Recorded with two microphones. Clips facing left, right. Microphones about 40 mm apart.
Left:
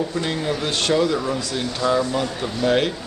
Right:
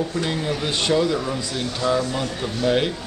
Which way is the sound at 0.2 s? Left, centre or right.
Centre.